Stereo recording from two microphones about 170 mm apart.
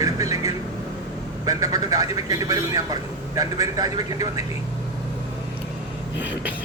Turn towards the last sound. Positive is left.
turn(degrees=-10)  # may be behind; listen again after turning